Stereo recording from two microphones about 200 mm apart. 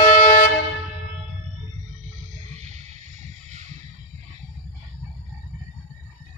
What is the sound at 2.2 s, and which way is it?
Music, 35° right (ahead or behind).